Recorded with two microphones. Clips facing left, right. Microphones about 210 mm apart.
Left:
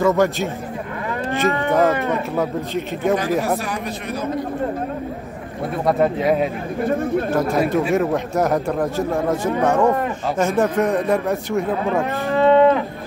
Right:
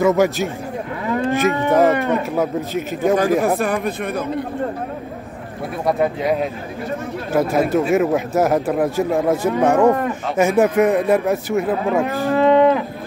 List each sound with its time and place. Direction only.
0.0 s speech: 10° right (ahead or behind)
1.8 s cattle: centre (ahead or behind)
3.2 s speech: 50° right (ahead or behind)
5.9 s cattle: centre (ahead or behind)
6.8 s speech: 55° left (ahead or behind)
7.3 s speech: 5° right (ahead or behind)
11.2 s cattle: centre (ahead or behind)